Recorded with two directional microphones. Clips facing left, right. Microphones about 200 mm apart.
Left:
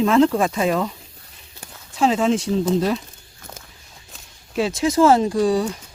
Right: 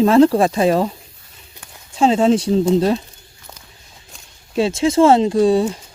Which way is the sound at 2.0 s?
30° right (ahead or behind).